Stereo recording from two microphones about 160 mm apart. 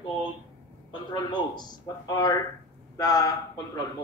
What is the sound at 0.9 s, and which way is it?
Speech, 30° left (ahead or behind).